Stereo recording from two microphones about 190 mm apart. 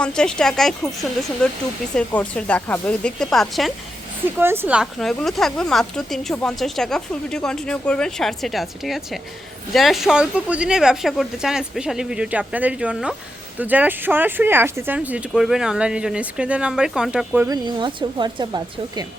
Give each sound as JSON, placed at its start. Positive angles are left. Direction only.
{"t": 0.0, "sound": "speech", "side_deg": 5}
{"t": 4.4, "sound": "speech", "side_deg": -10}
{"t": 17.5, "sound": "speech", "side_deg": -25}